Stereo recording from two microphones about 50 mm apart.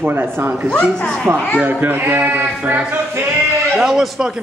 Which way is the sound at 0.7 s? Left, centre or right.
Centre.